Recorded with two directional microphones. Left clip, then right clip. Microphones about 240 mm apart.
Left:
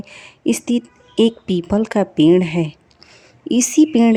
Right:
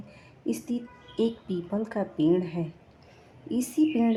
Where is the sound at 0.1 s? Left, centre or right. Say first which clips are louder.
Left 12 dB; left.